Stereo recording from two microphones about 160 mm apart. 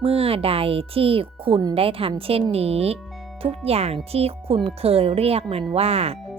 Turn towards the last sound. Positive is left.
turn(degrees=-40)  # may be behind; listen again after turning